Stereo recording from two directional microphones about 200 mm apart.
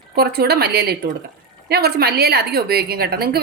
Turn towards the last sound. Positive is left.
turn(degrees=-50)  # may be behind; listen again after turning